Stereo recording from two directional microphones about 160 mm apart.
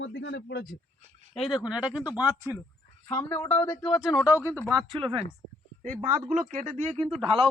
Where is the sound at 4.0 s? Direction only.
5° right (ahead or behind).